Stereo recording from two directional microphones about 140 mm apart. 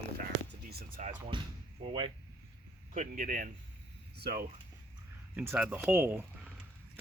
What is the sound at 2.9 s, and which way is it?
Speech, 65° right (ahead or behind).